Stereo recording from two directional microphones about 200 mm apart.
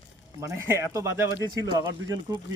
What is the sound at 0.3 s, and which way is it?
Speech, 15° right (ahead or behind).